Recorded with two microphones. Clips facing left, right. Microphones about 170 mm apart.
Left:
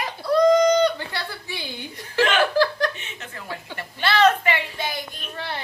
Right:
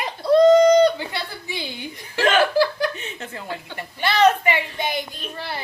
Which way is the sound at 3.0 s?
35° right (ahead or behind).